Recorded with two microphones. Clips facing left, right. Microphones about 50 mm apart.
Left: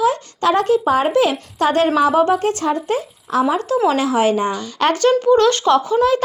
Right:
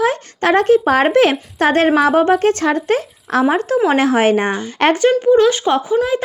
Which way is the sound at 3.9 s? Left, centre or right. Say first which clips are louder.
Right 4 dB; right.